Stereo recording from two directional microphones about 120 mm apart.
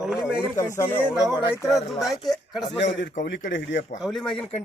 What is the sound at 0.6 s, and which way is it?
Speech, 25° left (ahead or behind).